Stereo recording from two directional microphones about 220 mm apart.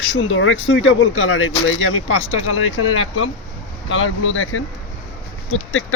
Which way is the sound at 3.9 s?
60° left (ahead or behind).